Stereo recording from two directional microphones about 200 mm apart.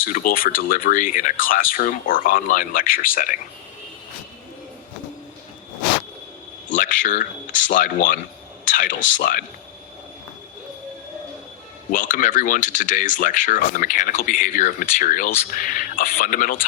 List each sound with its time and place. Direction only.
0.0 s speech: 45° left (ahead or behind)
6.7 s speech: 40° left (ahead or behind)
11.9 s speech: 40° left (ahead or behind)